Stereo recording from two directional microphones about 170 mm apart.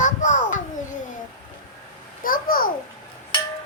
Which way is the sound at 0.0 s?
45° left (ahead or behind).